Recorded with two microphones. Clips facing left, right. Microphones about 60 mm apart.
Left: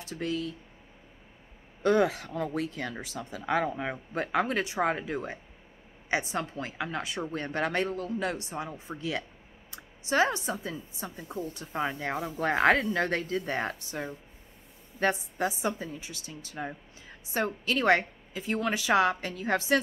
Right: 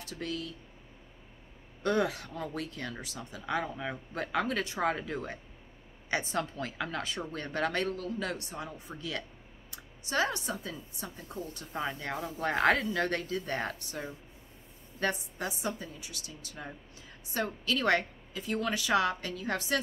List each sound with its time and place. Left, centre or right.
0.0 s speech: left
1.8 s a woman's voice: left